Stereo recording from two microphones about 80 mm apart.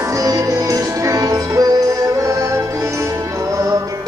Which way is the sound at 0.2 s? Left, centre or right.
Right.